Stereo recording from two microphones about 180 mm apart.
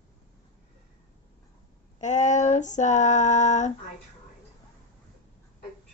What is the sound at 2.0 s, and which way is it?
Female singing, 40° left (ahead or behind).